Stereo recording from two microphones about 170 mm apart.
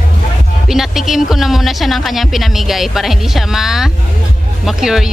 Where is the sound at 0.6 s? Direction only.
Centre (ahead or behind).